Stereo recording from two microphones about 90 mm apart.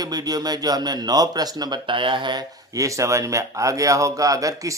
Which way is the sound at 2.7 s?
35° right (ahead or behind).